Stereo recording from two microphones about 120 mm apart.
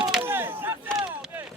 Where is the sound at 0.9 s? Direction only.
Centre (ahead or behind).